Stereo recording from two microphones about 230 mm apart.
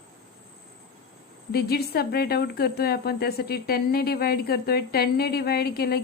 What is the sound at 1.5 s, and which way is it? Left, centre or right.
A woman's voice, left.